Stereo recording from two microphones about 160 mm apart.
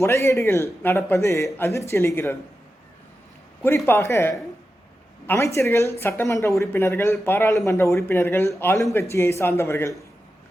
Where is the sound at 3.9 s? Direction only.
15° left (ahead or behind).